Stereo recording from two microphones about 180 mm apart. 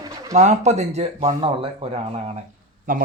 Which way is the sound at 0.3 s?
40° right (ahead or behind).